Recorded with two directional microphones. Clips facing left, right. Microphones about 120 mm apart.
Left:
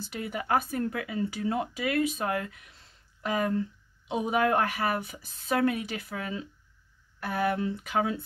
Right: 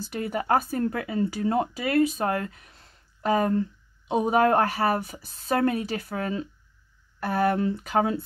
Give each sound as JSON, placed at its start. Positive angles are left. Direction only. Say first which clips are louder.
{"t": 0.0, "sound": "speech", "louder": "right 5 dB", "side_deg": -40}